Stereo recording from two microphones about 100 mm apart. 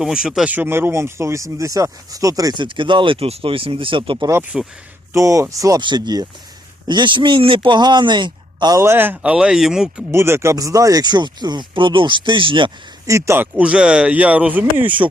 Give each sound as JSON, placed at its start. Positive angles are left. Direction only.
{"t": 0.0, "sound": "speech", "side_deg": -5}
{"t": 0.5, "sound": "speech", "side_deg": -20}
{"t": 2.6, "sound": "speech", "side_deg": -55}
{"t": 4.5, "sound": "speech", "side_deg": -5}
{"t": 5.1, "sound": "speech", "side_deg": -30}
{"t": 5.8, "sound": "speech", "side_deg": -45}
{"t": 8.7, "sound": "speech", "side_deg": -25}
{"t": 10.1, "sound": "speech", "side_deg": -25}
{"t": 13.1, "sound": "speech", "side_deg": -30}